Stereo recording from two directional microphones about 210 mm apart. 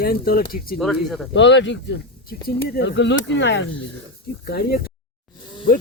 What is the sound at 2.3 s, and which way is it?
Speech, 45° left (ahead or behind).